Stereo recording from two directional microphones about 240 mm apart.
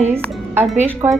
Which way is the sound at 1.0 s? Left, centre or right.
Centre.